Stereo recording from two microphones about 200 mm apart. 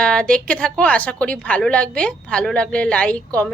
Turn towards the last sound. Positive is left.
turn(degrees=5)  # may be behind; listen again after turning